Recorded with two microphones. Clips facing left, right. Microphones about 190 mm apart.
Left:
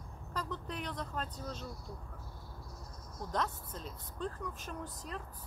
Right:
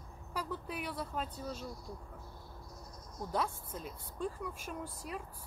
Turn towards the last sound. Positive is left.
turn(degrees=-10)  # may be behind; listen again after turning